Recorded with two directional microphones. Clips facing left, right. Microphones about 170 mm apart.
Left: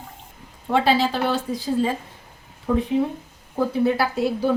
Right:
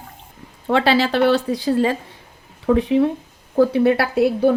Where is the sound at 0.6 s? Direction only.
90° right; by 1.9 s 75° right (ahead or behind).